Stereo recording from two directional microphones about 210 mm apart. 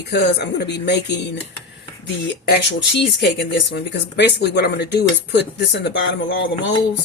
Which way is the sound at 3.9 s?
55° left (ahead or behind).